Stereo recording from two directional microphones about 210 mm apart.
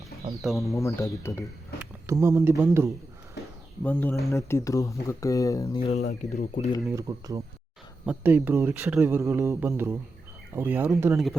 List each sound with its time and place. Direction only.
0.4 s speech: centre (ahead or behind)
0.7 s speech: 15° left (ahead or behind)
1.8 s speech: 15° right (ahead or behind)
3.8 s speech: 10° left (ahead or behind)
5.8 s speech: 30° left (ahead or behind)
6.9 s speech: 15° right (ahead or behind)